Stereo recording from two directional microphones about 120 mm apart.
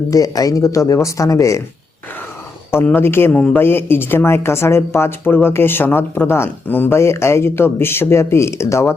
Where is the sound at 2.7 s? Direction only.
15° left (ahead or behind).